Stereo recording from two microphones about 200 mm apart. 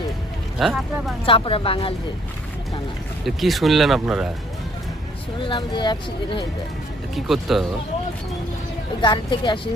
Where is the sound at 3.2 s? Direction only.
Centre (ahead or behind).